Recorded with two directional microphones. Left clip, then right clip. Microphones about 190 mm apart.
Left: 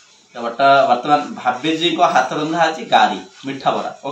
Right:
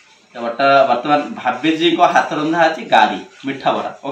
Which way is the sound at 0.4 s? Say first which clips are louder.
Even; 5° right (ahead or behind).